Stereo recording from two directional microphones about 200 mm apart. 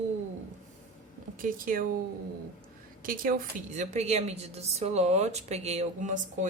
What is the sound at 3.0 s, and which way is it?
A woman's voice, 45° right (ahead or behind).